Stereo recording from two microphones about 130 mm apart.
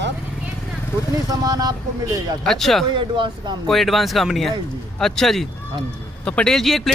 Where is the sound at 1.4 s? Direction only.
30° right (ahead or behind).